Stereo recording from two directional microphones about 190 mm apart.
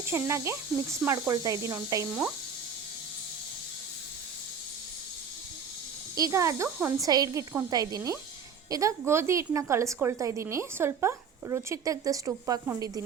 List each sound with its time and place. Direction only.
0.0 s a woman's voice: 15° right (ahead or behind)
6.1 s a woman's voice: 15° right (ahead or behind)